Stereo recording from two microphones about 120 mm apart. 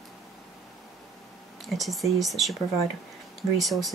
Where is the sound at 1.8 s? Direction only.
Centre (ahead or behind).